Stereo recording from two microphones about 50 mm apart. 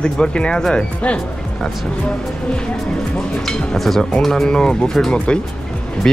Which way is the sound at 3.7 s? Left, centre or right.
Centre.